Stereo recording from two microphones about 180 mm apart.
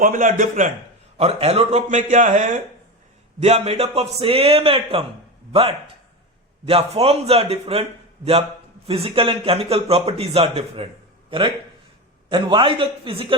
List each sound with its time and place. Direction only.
0.0 s a man's voice: 50° right (ahead or behind)
1.2 s a man's voice: 35° right (ahead or behind)